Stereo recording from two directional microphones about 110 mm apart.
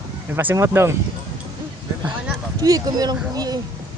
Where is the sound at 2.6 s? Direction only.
35° right (ahead or behind).